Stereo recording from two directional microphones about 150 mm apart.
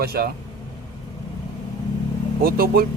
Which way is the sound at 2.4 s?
90° right.